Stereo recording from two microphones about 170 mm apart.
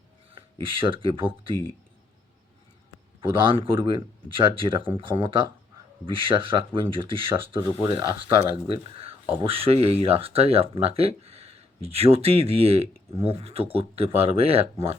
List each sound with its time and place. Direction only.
0.3 s speech: 30° right (ahead or behind)
3.2 s speech: 30° right (ahead or behind)